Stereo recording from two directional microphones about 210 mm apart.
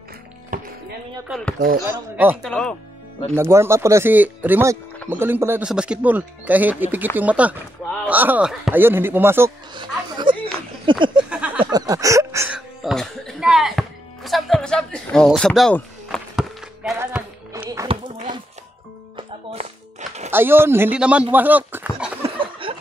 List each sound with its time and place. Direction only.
0.5 s music: 40° right (ahead or behind)
1.3 s speech: centre (ahead or behind)
2.4 s speech: 5° left (ahead or behind)
3.3 s speech: 10° right (ahead or behind)
9.8 s a sound: 25° right (ahead or behind)
11.2 s a sound: 5° right (ahead or behind)
11.6 s speech: 20° right (ahead or behind); by 16.9 s centre (ahead or behind)
17.0 s music: 10° right (ahead or behind)
17.6 s a sound: 20° right (ahead or behind)
19.1 s music: 30° right (ahead or behind)
20.2 s speech: 10° right (ahead or behind)
22.2 s a sound: 25° right (ahead or behind)